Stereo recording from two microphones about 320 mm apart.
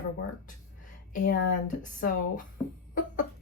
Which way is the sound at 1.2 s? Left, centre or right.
Left.